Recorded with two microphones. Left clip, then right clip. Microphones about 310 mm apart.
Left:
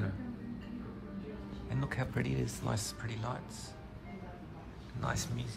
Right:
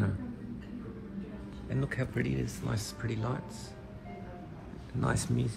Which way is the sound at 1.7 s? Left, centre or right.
Centre.